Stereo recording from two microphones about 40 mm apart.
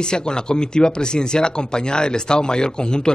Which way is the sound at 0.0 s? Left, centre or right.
Left.